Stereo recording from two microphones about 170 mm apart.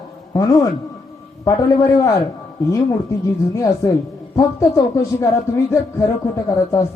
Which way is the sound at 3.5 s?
20° left (ahead or behind).